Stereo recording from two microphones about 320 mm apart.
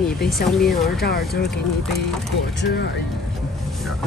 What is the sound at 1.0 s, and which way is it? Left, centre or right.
Speech, left.